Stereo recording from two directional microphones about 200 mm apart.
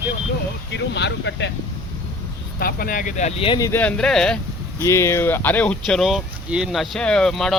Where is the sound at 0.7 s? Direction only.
60° left (ahead or behind).